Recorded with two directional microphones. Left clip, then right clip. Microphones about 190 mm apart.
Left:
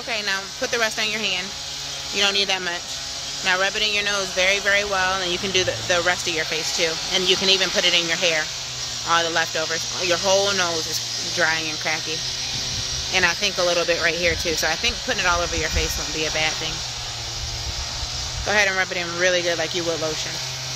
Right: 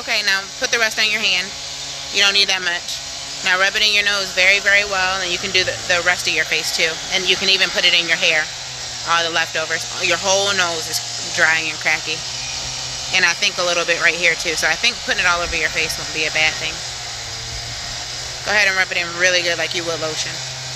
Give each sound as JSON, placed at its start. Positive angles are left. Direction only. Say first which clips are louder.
{"t": 0.1, "sound": "speech", "louder": "right 7 dB", "side_deg": 5}
{"t": 18.5, "sound": "speech", "louder": "right 4 dB", "side_deg": 10}